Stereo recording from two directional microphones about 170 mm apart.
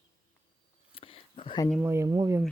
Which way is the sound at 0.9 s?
35° left (ahead or behind).